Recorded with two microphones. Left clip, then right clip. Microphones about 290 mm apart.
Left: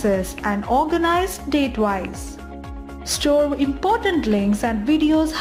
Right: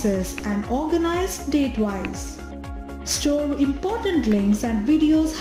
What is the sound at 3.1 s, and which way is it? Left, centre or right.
Speech, left.